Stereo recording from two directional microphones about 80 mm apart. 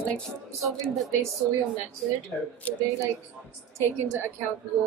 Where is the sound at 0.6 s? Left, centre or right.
Centre.